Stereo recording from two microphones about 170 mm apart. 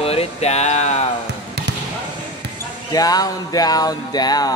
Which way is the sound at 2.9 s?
20° left (ahead or behind).